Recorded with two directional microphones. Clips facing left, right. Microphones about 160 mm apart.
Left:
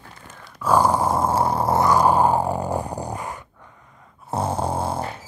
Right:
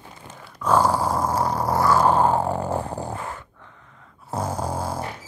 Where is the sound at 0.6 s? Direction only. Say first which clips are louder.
Left 1 dB; 15° left (ahead or behind).